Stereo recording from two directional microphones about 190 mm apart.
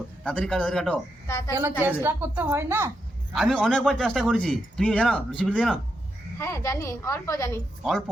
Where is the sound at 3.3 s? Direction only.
Centre (ahead or behind).